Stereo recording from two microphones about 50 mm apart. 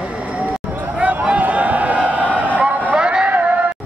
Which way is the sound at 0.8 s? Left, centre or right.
Right.